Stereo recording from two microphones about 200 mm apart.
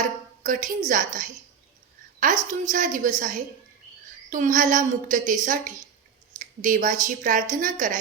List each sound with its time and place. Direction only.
0.4 s speech: 40° right (ahead or behind)
2.5 s speech: 40° right (ahead or behind)